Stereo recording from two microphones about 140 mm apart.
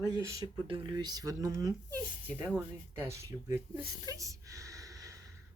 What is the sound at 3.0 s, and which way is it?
Speech, 20° right (ahead or behind).